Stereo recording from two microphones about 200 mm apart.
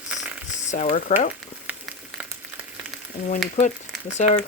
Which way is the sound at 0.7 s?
35° left (ahead or behind).